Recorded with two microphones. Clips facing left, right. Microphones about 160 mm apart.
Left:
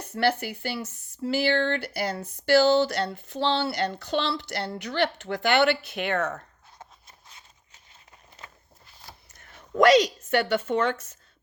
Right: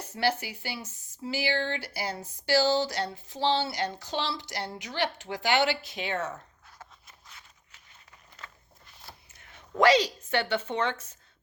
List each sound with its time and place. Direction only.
0.1 s speech: 60° left (ahead or behind)
7.3 s a sound: 25° left (ahead or behind)
9.3 s a woman's voice: 45° left (ahead or behind)